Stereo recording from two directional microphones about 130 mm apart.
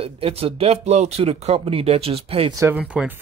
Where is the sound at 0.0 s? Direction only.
50° right (ahead or behind).